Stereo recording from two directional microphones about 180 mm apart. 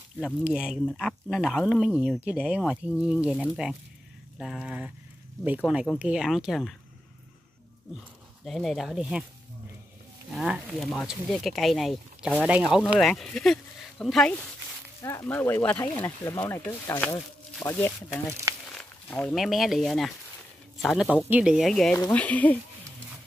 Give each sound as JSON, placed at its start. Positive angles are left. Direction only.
{"t": 0.4, "sound": "speech", "side_deg": -5}
{"t": 5.9, "sound": "speech", "side_deg": -5}
{"t": 8.5, "sound": "speech", "side_deg": 0}
{"t": 10.3, "sound": "speech", "side_deg": 0}
{"t": 15.0, "sound": "speech", "side_deg": 15}